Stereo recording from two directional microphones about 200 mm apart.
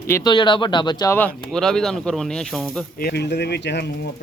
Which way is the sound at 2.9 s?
50° left (ahead or behind).